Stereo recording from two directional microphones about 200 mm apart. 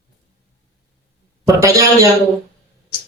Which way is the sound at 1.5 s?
15° right (ahead or behind).